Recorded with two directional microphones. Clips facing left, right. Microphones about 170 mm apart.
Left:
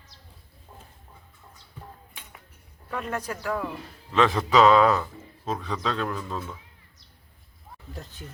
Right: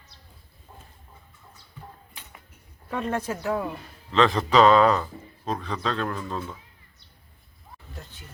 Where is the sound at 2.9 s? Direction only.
30° right (ahead or behind).